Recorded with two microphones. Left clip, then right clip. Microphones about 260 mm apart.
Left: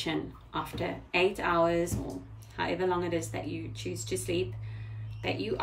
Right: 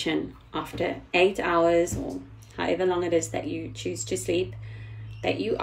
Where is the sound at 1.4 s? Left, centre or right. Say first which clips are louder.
Right 5 dB; right.